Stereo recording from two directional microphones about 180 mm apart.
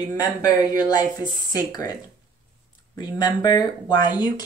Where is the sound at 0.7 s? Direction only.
20° left (ahead or behind).